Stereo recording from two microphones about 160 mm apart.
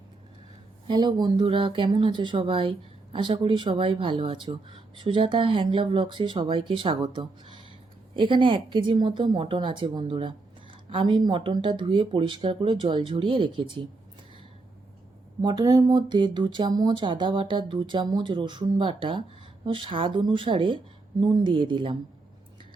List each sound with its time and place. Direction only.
0.9 s speech: 30° right (ahead or behind)
15.4 s speech: 25° right (ahead or behind)